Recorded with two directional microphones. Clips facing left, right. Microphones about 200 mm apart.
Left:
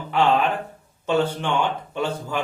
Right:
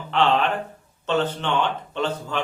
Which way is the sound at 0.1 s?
10° left (ahead or behind).